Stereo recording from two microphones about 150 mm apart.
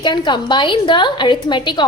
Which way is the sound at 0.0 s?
30° left (ahead or behind).